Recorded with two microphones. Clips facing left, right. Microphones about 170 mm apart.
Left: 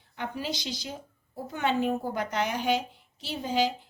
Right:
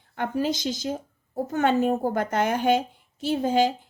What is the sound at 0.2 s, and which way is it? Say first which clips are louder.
A woman's voice: right 8 dB; 45° right (ahead or behind).